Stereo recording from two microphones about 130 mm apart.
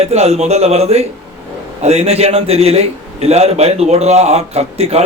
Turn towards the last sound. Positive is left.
turn(degrees=-50)  # may be behind; listen again after turning